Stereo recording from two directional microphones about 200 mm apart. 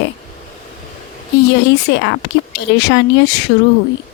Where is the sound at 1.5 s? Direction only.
60° left (ahead or behind).